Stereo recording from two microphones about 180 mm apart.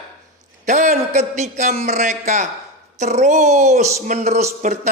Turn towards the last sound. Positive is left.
turn(degrees=-40)  # may be behind; listen again after turning